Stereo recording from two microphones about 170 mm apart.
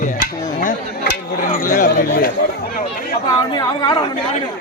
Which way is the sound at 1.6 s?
55° left (ahead or behind).